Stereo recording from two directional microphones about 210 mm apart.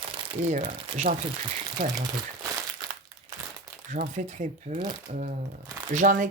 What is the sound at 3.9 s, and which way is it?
Speech, 35° right (ahead or behind).